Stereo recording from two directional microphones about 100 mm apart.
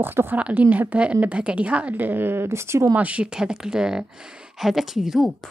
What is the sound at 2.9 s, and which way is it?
Speech, 10° right (ahead or behind).